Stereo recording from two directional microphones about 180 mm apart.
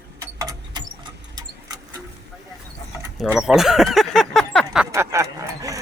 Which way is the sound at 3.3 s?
Centre (ahead or behind).